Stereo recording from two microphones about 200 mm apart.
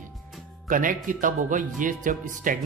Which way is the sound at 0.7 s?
40° right (ahead or behind).